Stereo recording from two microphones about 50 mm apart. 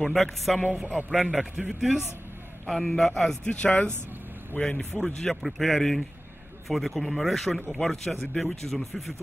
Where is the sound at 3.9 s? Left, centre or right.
Right.